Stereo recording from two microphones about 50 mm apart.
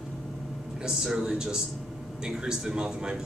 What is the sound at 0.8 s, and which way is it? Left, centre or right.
A man's voice, centre.